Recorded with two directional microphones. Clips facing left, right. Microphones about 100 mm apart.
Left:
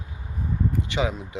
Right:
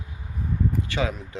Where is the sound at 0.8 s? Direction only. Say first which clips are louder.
Left 1 dB; 20° left (ahead or behind).